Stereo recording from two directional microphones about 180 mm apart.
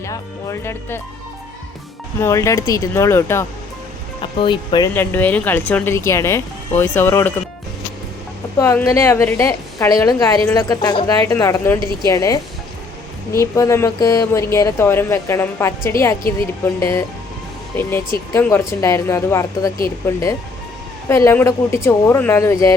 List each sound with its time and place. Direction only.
0.0 s speech: 15° left (ahead or behind)
2.2 s speech: 15° left (ahead or behind)
4.2 s speech: 30° left (ahead or behind)
4.9 s speech: 10° left (ahead or behind)
8.5 s speech: 15° left (ahead or behind)
18.3 s speech: 15° left (ahead or behind)